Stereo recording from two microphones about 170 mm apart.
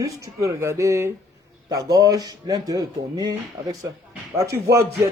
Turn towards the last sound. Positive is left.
turn(degrees=-15)  # may be behind; listen again after turning